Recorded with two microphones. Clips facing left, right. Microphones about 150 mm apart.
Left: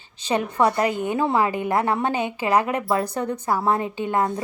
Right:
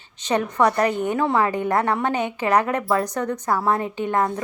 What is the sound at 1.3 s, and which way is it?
Speech, 15° left (ahead or behind).